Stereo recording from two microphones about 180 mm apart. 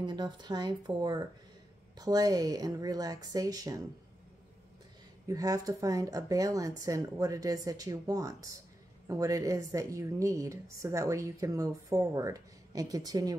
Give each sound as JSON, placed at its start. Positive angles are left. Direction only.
{"t": 0.0, "sound": "speech", "side_deg": -25}
{"t": 5.3, "sound": "a woman's voice", "side_deg": -20}